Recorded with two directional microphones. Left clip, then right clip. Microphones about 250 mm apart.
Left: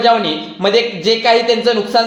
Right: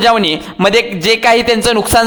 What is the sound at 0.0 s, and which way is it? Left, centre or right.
A man's voice, right.